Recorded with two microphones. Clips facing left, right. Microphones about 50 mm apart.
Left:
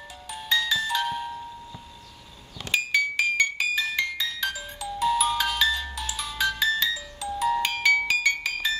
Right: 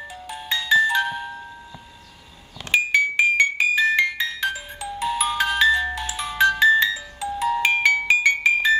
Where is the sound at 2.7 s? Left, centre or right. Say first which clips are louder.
Right 5 dB; right.